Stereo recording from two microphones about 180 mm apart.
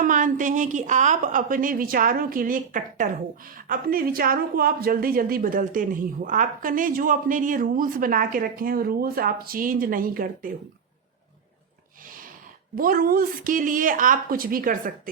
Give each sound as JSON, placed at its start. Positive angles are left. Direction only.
{"t": 0.0, "sound": "speech", "side_deg": -45}
{"t": 12.7, "sound": "speech", "side_deg": -55}